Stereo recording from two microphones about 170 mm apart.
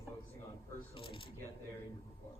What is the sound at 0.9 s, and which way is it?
Speech, 30° left (ahead or behind).